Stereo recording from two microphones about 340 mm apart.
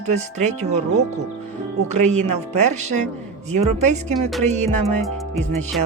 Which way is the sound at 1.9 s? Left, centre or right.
Centre.